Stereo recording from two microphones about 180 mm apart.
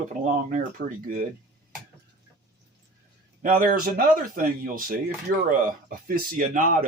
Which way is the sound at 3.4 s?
50° right (ahead or behind).